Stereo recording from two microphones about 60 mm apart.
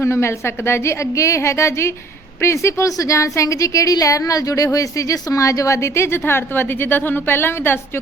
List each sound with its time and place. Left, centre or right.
0.0 s a woman's voice: left